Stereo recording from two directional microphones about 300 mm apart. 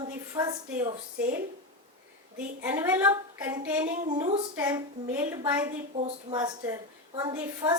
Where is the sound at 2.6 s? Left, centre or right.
Centre.